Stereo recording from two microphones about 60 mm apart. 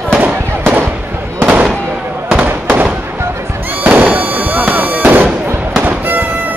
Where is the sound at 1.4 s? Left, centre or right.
Right.